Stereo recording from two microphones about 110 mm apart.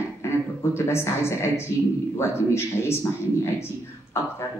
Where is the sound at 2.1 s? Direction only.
25° left (ahead or behind).